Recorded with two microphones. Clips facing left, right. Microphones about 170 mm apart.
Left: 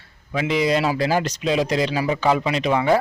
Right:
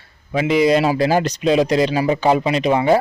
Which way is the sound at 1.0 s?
40° right (ahead or behind).